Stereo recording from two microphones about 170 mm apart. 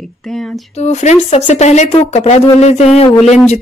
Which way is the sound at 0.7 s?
40° left (ahead or behind).